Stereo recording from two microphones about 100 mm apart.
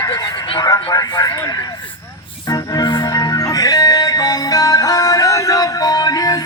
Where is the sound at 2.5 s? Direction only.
45° left (ahead or behind).